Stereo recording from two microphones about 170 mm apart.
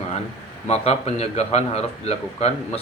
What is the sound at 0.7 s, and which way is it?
Speech, 35° left (ahead or behind).